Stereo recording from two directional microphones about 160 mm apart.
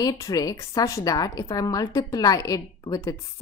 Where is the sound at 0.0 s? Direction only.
25° left (ahead or behind).